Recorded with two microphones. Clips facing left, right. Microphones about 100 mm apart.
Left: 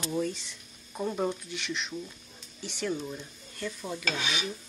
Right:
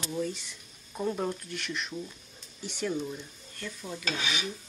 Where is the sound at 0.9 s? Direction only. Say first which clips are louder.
Left 1 dB; 5° left (ahead or behind).